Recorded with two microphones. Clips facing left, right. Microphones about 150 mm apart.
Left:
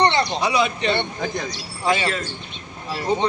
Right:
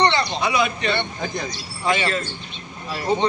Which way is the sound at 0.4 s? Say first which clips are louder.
Left 1 dB; 30° left (ahead or behind).